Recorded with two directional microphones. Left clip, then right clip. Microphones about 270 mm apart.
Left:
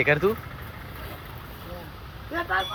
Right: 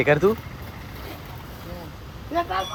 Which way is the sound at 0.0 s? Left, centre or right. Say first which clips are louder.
Right 3 dB; centre.